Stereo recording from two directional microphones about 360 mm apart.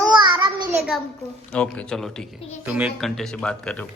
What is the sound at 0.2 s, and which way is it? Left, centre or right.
Child singing, centre.